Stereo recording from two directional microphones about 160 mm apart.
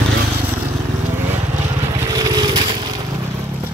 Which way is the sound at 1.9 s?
25° right (ahead or behind).